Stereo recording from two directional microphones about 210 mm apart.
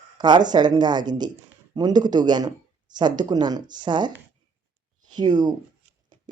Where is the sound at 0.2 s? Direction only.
20° right (ahead or behind).